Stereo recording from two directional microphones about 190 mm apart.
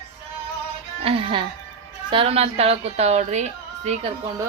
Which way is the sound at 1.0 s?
30° right (ahead or behind).